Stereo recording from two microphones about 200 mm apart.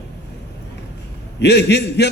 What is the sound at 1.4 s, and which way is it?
Speech, 55° left (ahead or behind).